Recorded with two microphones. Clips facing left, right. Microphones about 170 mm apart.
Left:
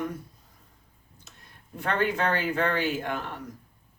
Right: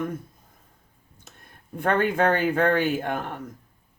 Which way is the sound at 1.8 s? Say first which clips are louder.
Right 5 dB; 50° right (ahead or behind).